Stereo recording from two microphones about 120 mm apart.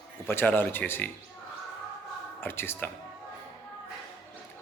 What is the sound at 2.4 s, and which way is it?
Speech, 20° left (ahead or behind).